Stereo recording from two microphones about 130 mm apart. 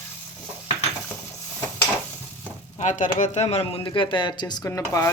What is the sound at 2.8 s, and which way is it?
Speech, 75° left (ahead or behind).